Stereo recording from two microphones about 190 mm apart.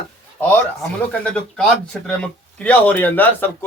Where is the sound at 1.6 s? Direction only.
5° left (ahead or behind).